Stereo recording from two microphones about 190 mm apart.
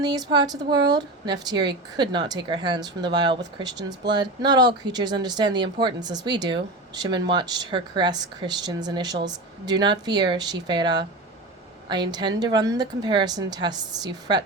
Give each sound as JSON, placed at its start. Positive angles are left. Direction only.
{"t": 0.0, "sound": "a woman's voice", "side_deg": -20}